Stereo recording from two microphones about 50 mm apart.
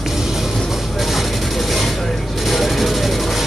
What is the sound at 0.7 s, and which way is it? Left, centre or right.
Vehicle, centre.